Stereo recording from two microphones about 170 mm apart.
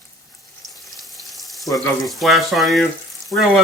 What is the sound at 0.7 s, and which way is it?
Frying, centre (ahead or behind).